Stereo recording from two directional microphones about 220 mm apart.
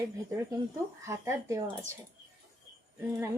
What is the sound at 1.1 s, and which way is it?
Speech, 10° right (ahead or behind).